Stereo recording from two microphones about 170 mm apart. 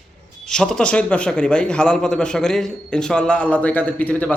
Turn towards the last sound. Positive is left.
turn(degrees=10)  # may be behind; listen again after turning